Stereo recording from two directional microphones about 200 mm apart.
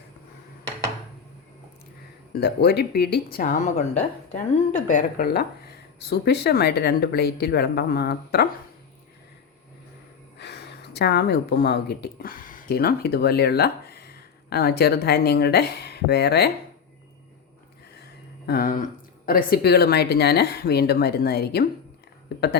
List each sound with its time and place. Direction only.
2.3 s speech: 55° left (ahead or behind)
10.3 s speech: 60° left (ahead or behind)
18.4 s speech: 45° left (ahead or behind)